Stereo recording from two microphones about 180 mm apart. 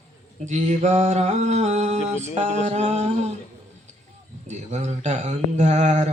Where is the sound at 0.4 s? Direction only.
40° right (ahead or behind).